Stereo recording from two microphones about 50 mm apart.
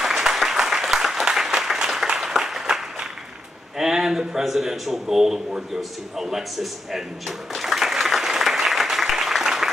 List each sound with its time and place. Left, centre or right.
0.0 s applause: centre
3.7 s speech: centre
5.8 s drawer open or close: centre